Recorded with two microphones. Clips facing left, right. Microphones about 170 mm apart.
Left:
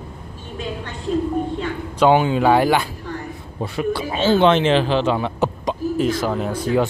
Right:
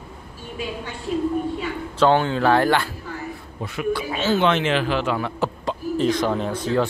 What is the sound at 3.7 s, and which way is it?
A man's voice, 30° left (ahead or behind).